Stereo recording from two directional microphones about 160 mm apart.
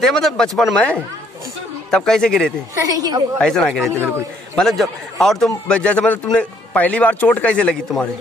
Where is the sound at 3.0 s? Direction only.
25° right (ahead or behind).